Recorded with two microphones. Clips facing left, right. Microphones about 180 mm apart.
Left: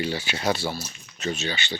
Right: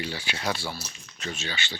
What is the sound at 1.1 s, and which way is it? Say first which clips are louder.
Speech: left 7 dB; 40° left (ahead or behind).